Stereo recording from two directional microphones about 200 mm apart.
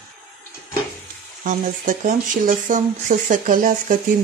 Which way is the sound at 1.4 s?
40° right (ahead or behind).